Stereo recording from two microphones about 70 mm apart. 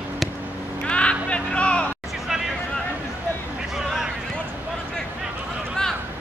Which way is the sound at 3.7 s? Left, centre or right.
Centre.